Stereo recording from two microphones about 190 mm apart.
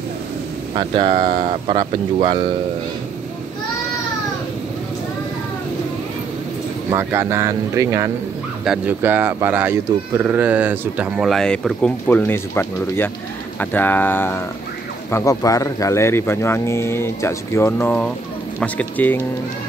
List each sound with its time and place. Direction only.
0.7 s speech: 25° right (ahead or behind)
6.9 s speech: 10° right (ahead or behind); by 19.2 s 10° left (ahead or behind)